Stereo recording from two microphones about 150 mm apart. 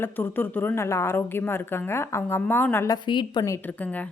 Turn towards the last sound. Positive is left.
turn(degrees=10)  # may be behind; listen again after turning